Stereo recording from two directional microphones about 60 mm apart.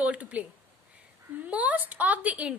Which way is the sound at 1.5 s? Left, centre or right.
Right.